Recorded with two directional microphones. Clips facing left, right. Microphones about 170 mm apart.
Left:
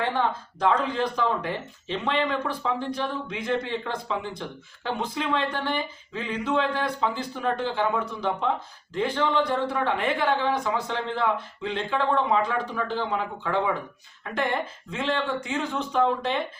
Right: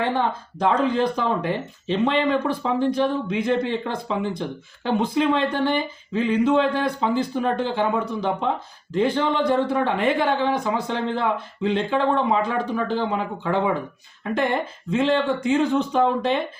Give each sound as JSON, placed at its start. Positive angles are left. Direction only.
{"t": 0.0, "sound": "speech", "side_deg": -20}